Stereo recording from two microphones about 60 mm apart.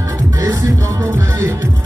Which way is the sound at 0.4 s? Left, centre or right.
Right.